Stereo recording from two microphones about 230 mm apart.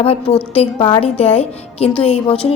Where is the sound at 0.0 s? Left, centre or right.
Left.